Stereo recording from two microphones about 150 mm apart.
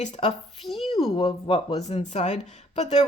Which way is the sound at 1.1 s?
35° left (ahead or behind).